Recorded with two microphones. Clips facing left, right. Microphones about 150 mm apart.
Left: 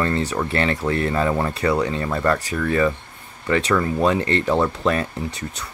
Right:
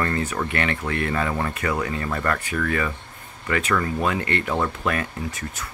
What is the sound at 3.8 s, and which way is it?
Speech, 30° left (ahead or behind).